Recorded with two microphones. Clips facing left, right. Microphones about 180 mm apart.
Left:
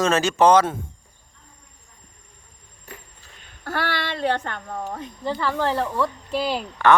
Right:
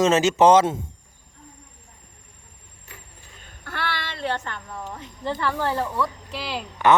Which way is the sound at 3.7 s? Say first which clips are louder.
Left 4 dB; 45° left (ahead or behind).